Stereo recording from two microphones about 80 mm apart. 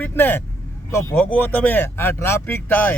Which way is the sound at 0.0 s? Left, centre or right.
Left.